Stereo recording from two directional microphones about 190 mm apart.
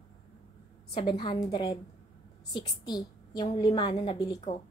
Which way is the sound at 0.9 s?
25° left (ahead or behind).